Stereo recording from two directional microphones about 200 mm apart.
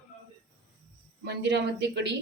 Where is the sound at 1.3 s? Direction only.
60° right (ahead or behind).